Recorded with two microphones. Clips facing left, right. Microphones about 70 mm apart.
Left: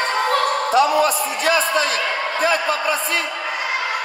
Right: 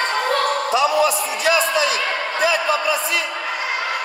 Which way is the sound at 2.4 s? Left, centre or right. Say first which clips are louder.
Right 1 dB; left.